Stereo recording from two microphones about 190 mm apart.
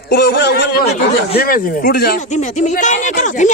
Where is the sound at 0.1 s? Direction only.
55° left (ahead or behind).